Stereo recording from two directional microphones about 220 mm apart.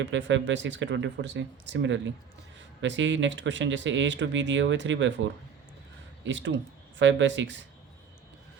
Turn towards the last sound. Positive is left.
turn(degrees=-55)  # may be behind; listen again after turning